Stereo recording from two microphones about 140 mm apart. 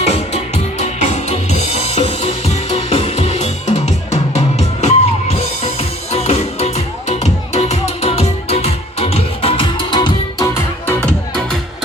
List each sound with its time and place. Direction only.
0.0 s music: 50° left (ahead or behind)
6.1 s music: 50° left (ahead or behind); by 11.1 s 20° left (ahead or behind)